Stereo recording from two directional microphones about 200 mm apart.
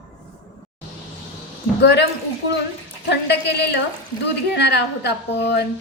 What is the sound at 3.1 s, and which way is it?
A woman's voice, 60° left (ahead or behind).